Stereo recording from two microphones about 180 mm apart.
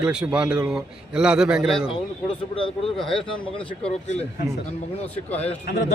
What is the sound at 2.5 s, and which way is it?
Speech, 30° left (ahead or behind).